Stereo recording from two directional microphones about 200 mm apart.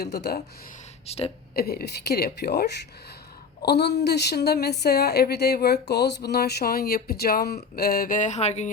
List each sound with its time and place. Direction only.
0.0 s a woman's voice: 55° left (ahead or behind)
1.0 s speech: 30° left (ahead or behind)
1.5 s a woman's voice: 50° left (ahead or behind); by 8.7 s 35° left (ahead or behind)